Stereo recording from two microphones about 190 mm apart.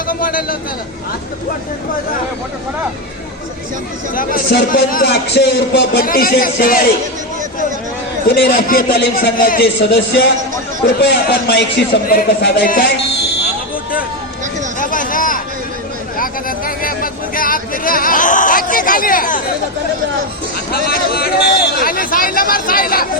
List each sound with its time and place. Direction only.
0.1 s a man's voice: 45° left (ahead or behind)
4.1 s a man's voice: 45° left (ahead or behind)
8.3 s a man's voice: 55° left (ahead or behind)
14.8 s a sound: 45° left (ahead or behind)
20.7 s a man's voice: 50° left (ahead or behind)